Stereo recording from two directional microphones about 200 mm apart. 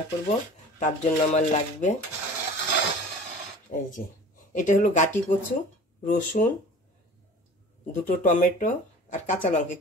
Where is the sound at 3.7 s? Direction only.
40° left (ahead or behind).